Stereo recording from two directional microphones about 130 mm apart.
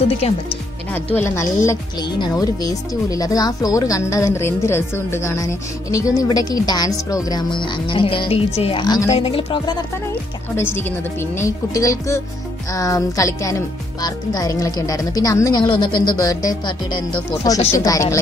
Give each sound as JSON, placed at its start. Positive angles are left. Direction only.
{"t": 1.1, "sound": "speech", "side_deg": 20}
{"t": 8.8, "sound": "speech", "side_deg": 30}
{"t": 9.1, "sound": "speech", "side_deg": 45}
{"t": 10.5, "sound": "speech", "side_deg": 15}
{"t": 15.6, "sound": "speech", "side_deg": 40}